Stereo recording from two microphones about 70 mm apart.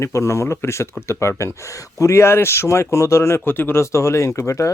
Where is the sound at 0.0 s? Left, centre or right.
Left.